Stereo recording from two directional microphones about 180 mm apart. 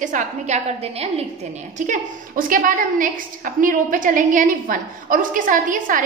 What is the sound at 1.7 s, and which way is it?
A woman's voice, 45° right (ahead or behind).